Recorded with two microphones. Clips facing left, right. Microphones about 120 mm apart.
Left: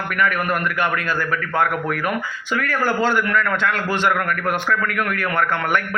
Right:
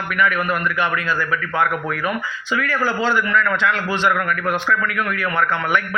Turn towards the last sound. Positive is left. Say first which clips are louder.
# even
turn(degrees=50)  # may be behind; listen again after turning